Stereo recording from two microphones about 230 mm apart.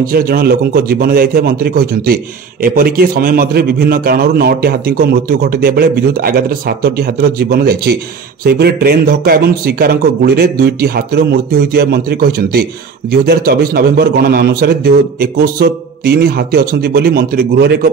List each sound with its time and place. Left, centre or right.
0.1 s a man's voice: right